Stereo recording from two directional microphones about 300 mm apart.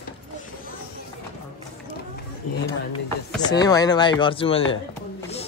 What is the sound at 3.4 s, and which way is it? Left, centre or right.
Speech, centre.